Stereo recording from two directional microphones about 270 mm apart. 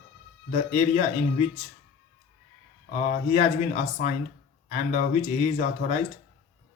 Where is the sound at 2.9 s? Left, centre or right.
Left.